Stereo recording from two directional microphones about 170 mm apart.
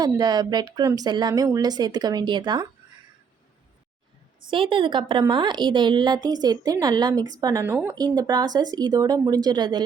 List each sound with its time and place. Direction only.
0.0 s a woman's voice: 25° right (ahead or behind)
4.5 s a woman's voice: 30° right (ahead or behind)